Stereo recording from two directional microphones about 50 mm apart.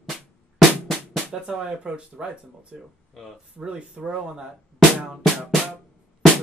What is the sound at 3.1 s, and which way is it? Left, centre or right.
Speech, centre.